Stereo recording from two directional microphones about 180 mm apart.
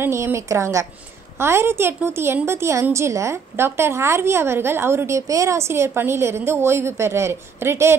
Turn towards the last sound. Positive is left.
turn(degrees=-15)  # may be behind; listen again after turning